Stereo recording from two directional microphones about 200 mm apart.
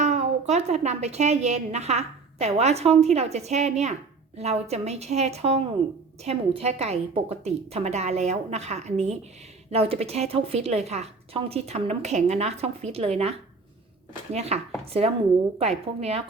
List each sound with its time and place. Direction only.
0.0 s a woman's voice: 35° right (ahead or behind)
14.3 s a woman's voice: 35° right (ahead or behind)